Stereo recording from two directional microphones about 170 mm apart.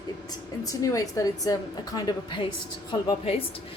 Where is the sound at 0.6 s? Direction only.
20° left (ahead or behind).